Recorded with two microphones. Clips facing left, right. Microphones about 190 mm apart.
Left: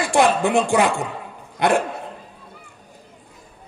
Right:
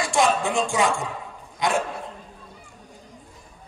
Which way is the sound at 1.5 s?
60° left (ahead or behind).